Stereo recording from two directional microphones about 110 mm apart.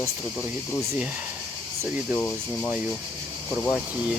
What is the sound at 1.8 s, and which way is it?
Speech, 15° right (ahead or behind).